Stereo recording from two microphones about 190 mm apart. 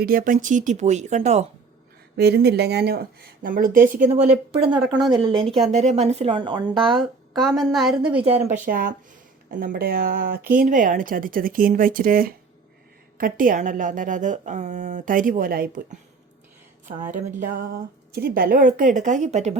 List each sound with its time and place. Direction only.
0.0 s speech: 50° right (ahead or behind)
2.1 s speech: 60° right (ahead or behind)
4.5 s speech: 25° right (ahead or behind)
5.0 s a woman's voice: centre (ahead or behind)
5.6 s speech: 35° right (ahead or behind)
6.9 s a woman's voice: centre (ahead or behind)
8.2 s speech: 35° right (ahead or behind); by 16.0 s 50° right (ahead or behind)
17.4 s speech: 45° right (ahead or behind)